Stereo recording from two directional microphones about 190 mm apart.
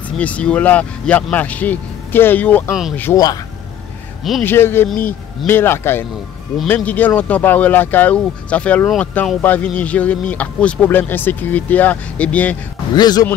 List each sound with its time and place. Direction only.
0.2 s speech: 5° left (ahead or behind)
4.2 s speech: centre (ahead or behind)
4.5 s speech: 10° left (ahead or behind)
12.9 s speech: 20° left (ahead or behind)